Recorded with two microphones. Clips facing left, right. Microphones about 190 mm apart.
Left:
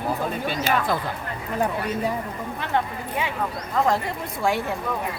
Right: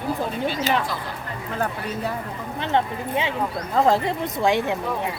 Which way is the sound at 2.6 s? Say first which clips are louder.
Right 4 dB; 25° right (ahead or behind).